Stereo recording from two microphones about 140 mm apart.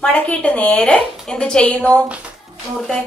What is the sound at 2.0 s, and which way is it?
Music, 10° right (ahead or behind).